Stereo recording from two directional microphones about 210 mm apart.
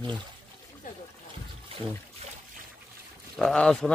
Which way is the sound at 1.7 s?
25° right (ahead or behind).